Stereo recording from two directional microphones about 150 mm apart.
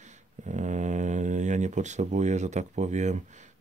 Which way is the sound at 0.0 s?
55° right (ahead or behind).